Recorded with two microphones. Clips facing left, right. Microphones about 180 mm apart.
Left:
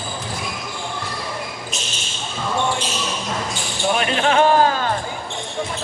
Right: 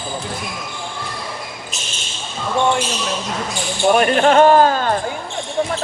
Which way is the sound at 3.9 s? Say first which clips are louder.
Right 5 dB; 45° right (ahead or behind).